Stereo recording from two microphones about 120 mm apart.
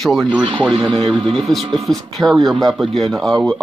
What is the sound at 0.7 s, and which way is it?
Speech, 45° right (ahead or behind).